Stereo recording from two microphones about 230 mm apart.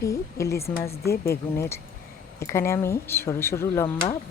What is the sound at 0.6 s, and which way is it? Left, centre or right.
Speech, left.